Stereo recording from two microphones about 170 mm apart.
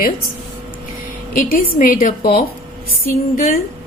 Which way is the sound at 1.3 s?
55° left (ahead or behind).